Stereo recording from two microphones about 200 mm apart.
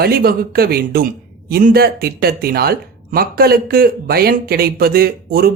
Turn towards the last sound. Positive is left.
turn(degrees=-50)  # may be behind; listen again after turning